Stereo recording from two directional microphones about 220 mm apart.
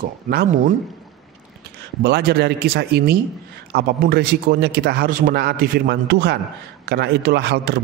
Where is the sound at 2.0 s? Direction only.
45° right (ahead or behind).